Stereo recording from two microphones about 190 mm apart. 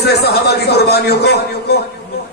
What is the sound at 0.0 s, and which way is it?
A man's voice, 60° left (ahead or behind).